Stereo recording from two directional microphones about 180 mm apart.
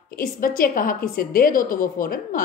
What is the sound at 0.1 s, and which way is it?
A woman's voice, 55° left (ahead or behind).